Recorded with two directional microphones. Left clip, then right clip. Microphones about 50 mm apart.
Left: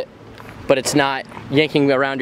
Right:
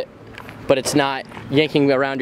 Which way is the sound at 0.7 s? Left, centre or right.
Centre.